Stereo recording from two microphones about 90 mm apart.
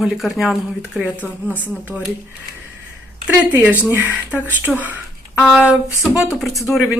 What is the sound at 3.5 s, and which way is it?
Speech, 20° right (ahead or behind).